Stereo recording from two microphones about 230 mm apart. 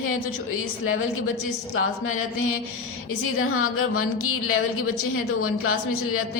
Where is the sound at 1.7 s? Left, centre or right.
Left.